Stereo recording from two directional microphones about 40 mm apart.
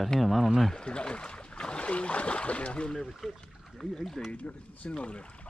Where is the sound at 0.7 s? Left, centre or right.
Left.